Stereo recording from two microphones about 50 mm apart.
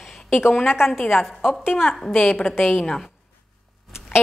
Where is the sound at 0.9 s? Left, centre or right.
Left.